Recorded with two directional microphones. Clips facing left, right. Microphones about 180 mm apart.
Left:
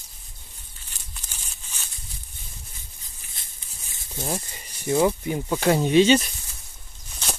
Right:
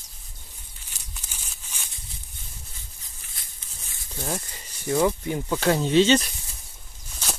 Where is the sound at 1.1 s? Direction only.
10° right (ahead or behind).